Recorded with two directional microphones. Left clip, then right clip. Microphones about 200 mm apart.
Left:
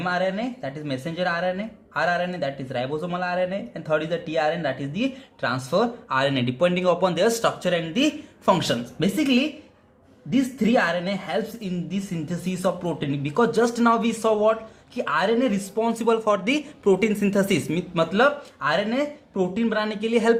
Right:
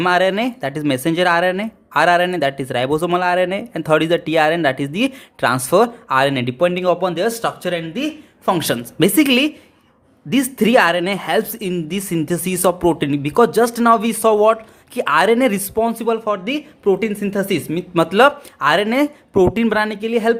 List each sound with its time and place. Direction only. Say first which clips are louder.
0.0 s speech: right 9 dB; 45° right (ahead or behind); by 17.8 s 20° right (ahead or behind)
17.9 s speech: right 7 dB; 35° right (ahead or behind)